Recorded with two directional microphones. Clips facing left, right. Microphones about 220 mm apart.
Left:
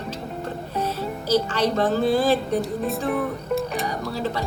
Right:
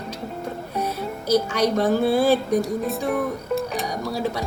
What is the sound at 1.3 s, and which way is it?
Speech, 10° right (ahead or behind).